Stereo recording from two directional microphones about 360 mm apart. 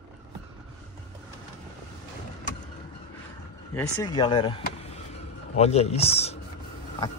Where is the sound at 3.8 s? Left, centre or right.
Centre.